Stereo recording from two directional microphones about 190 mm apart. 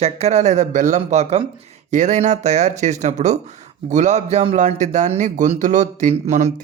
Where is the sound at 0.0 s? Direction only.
35° right (ahead or behind).